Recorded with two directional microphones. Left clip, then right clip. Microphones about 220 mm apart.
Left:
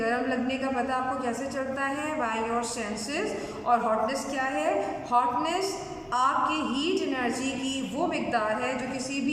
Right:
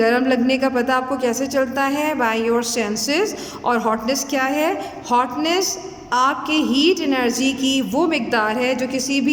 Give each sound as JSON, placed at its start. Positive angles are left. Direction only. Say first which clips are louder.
{"t": 0.0, "sound": "a woman's voice", "louder": "right 11 dB", "side_deg": -45}